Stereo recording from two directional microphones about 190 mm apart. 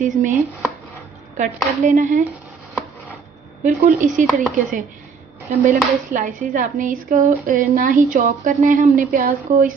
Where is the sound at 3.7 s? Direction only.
45° right (ahead or behind).